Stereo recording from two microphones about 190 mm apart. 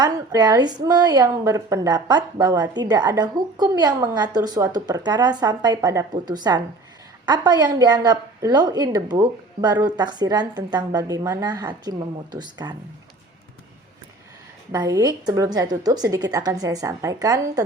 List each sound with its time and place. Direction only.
0.0 s a woman's voice: 20° right (ahead or behind)
14.7 s a woman's voice: 15° right (ahead or behind)